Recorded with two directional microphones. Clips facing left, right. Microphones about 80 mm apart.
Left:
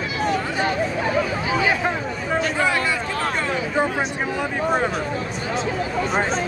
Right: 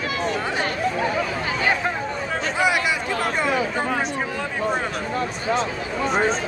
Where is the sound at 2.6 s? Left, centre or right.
Centre.